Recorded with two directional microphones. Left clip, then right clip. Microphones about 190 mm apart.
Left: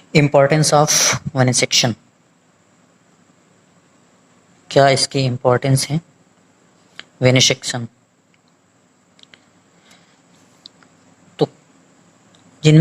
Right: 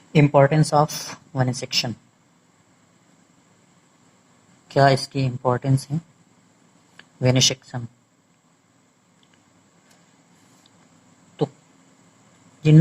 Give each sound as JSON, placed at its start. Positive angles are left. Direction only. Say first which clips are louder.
{"t": 0.3, "sound": "speech", "louder": "left 4 dB", "side_deg": 35}
{"t": 4.7, "sound": "speech", "louder": "left 5 dB", "side_deg": 35}